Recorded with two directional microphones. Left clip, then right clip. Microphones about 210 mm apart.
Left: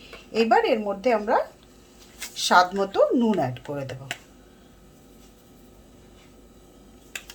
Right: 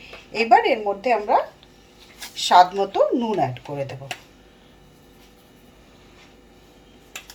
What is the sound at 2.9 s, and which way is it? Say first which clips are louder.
Speech: right 1 dB; 45° left (ahead or behind).